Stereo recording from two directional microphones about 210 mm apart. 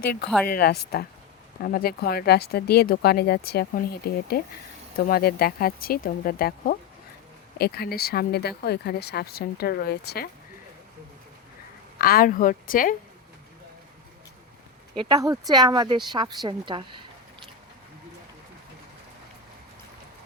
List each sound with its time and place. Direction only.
0.4 s speech: 50° left (ahead or behind)
11.9 s a woman's voice: 45° left (ahead or behind)
14.9 s a woman's voice: 20° right (ahead or behind)